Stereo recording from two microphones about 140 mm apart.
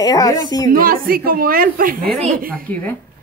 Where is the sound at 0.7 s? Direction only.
90° right.